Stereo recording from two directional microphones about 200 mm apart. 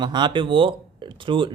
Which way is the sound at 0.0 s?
20° right (ahead or behind).